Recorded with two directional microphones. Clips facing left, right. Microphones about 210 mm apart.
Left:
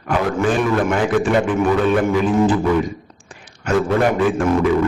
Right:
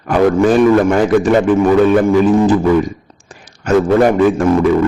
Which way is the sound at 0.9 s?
40° right (ahead or behind).